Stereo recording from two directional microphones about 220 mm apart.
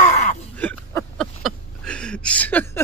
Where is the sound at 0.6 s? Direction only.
5° left (ahead or behind).